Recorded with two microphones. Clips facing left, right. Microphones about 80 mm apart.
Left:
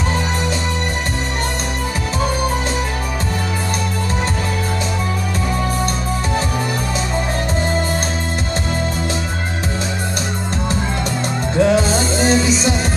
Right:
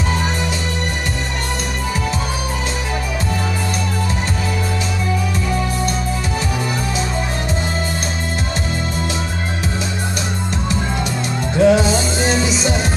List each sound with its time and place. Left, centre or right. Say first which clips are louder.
11.6 s music: right 2 dB; left